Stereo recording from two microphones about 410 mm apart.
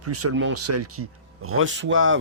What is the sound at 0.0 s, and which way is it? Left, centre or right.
Speech, right.